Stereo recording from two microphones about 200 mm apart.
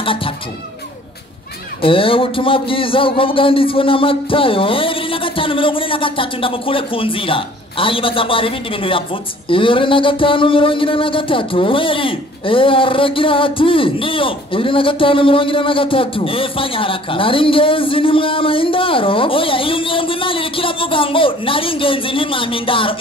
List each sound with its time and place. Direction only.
0.0 s speech: 25° left (ahead or behind)
1.8 s speech: 25° left (ahead or behind)